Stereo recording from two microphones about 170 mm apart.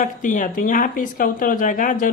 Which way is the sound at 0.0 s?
50° left (ahead or behind).